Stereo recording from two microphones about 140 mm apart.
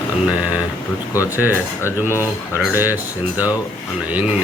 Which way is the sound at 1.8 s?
20° left (ahead or behind).